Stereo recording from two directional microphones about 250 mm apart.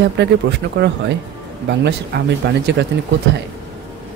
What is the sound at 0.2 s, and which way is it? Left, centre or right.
Speech, right.